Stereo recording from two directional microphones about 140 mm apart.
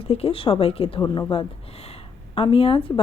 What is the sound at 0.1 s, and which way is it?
Speech, 45° left (ahead or behind).